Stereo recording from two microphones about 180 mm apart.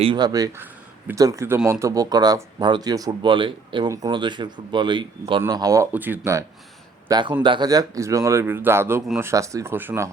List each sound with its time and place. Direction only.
0.0 s a man's voice: 25° right (ahead or behind)
7.1 s a man's voice: 25° right (ahead or behind); by 9.3 s 5° right (ahead or behind)
9.3 s a man's voice: 20° right (ahead or behind)